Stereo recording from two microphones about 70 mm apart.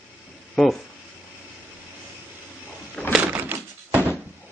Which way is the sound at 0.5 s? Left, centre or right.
Centre.